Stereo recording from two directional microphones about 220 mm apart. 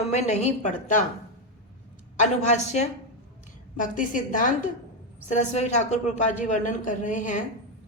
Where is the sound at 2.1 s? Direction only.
35° left (ahead or behind).